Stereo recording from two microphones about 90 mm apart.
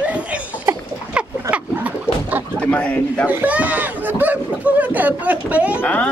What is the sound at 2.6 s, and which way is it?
Speech, 15° left (ahead or behind).